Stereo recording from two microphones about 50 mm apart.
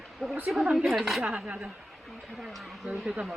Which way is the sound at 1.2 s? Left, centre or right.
Right.